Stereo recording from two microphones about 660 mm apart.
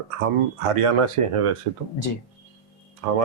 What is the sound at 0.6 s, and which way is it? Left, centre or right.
Speech, right.